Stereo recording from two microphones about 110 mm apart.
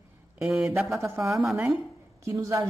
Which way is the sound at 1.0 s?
25° right (ahead or behind).